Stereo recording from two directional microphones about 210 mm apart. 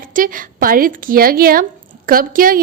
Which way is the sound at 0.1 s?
40° right (ahead or behind).